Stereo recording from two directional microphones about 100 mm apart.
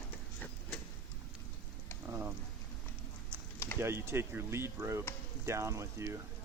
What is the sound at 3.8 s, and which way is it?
Speech, 25° right (ahead or behind).